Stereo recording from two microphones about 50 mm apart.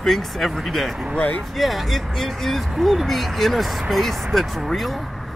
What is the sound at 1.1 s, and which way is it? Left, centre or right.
Speech, left.